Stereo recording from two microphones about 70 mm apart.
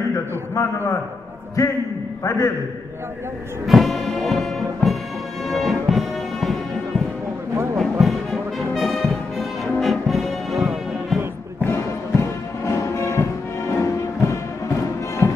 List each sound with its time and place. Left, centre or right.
0.6 s a man's voice: left
2.2 s a man's voice: left
3.6 s music: centre
7.7 s music: centre
11.6 s music: left